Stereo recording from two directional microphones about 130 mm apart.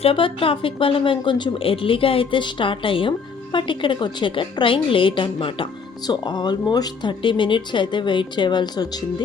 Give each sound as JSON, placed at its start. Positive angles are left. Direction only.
{"t": 0.0, "sound": "a woman's voice", "side_deg": 45}